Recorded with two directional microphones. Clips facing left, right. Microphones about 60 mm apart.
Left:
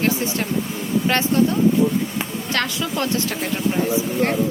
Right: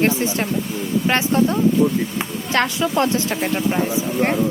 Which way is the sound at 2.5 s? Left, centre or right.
Right.